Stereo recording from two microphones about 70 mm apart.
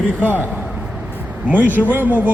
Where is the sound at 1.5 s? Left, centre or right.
Right.